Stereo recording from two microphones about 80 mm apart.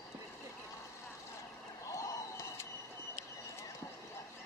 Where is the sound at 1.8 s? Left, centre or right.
Left.